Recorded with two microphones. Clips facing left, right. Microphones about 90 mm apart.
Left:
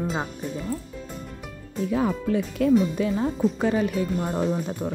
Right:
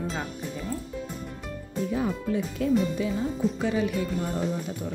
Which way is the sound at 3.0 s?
55° left (ahead or behind).